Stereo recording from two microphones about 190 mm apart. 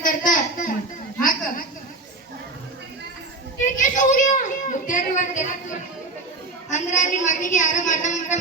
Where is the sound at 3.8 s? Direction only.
40° left (ahead or behind).